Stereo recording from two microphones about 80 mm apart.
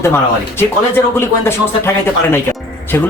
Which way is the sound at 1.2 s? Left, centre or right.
Left.